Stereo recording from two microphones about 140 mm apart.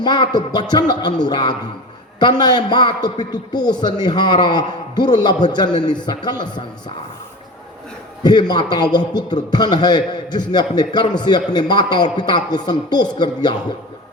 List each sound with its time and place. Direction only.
0.0 s a man's voice: 30° left (ahead or behind)
8.2 s a man's voice: 30° left (ahead or behind)